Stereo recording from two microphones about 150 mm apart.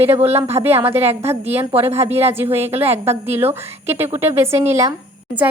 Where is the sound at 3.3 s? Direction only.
15° right (ahead or behind).